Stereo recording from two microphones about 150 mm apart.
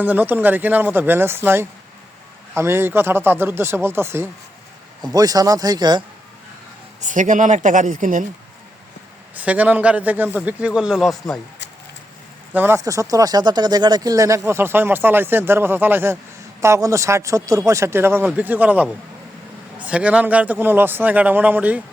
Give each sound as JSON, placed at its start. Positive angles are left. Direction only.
{"t": 0.0, "sound": "speech", "side_deg": -10}
{"t": 7.0, "sound": "speech", "side_deg": -55}
{"t": 9.3, "sound": "speech", "side_deg": -10}
{"t": 12.5, "sound": "speech", "side_deg": -15}